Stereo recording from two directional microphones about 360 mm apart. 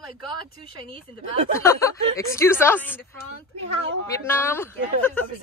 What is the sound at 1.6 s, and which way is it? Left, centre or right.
A woman's voice, centre.